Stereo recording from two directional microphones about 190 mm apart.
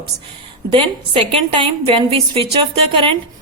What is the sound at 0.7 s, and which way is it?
A woman's voice, 30° right (ahead or behind).